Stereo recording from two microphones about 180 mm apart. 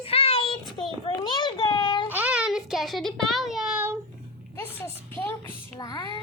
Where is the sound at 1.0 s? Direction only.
25° left (ahead or behind).